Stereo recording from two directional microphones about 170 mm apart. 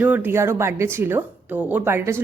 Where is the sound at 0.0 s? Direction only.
10° right (ahead or behind).